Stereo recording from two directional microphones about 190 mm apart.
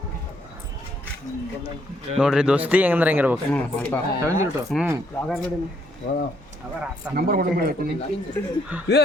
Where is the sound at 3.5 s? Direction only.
5° left (ahead or behind).